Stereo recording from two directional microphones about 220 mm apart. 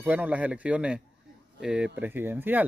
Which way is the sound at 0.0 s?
5° right (ahead or behind).